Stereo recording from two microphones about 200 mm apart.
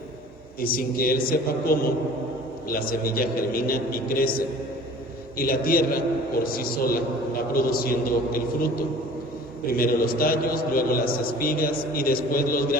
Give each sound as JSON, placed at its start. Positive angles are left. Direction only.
{"t": 0.6, "sound": "a man's voice", "side_deg": 45}
{"t": 5.4, "sound": "a man's voice", "side_deg": 45}